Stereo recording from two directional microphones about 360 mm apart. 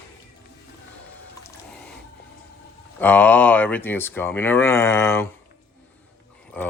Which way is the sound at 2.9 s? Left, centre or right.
Centre.